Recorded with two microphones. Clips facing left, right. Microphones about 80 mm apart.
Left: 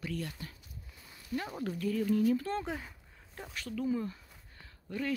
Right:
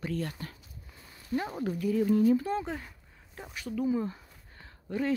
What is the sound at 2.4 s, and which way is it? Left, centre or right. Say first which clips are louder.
Speech: right 4 dB; centre.